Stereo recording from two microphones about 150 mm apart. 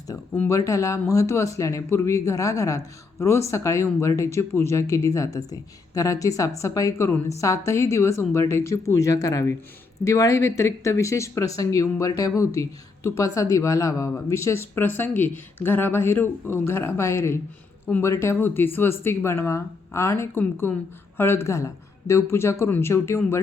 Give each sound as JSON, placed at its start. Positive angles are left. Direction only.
{"t": 0.3, "sound": "speech", "side_deg": 20}